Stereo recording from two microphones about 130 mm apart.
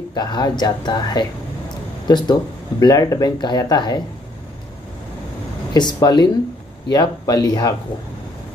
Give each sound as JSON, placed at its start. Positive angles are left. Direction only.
{"t": 0.1, "sound": "speech", "side_deg": 30}
{"t": 5.7, "sound": "speech", "side_deg": 30}